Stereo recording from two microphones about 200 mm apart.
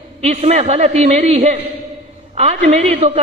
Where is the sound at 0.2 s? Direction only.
35° right (ahead or behind).